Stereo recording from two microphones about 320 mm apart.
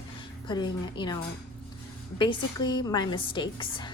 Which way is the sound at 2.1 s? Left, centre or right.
Centre.